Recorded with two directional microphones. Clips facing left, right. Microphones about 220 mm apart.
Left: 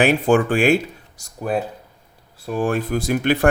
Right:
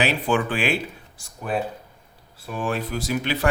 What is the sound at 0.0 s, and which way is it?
Speech, 45° left (ahead or behind).